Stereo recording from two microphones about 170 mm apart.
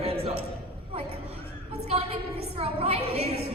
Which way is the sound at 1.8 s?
35° right (ahead or behind).